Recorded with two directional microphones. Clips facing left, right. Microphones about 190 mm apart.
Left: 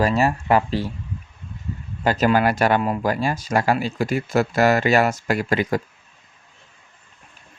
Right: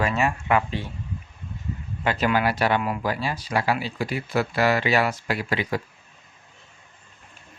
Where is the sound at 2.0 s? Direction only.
40° left (ahead or behind).